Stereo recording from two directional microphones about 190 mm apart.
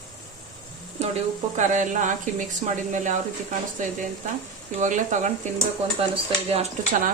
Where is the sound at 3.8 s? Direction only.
40° right (ahead or behind).